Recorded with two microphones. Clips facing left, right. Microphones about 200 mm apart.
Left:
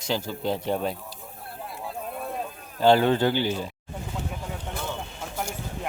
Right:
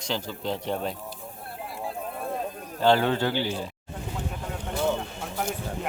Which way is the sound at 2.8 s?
15° left (ahead or behind).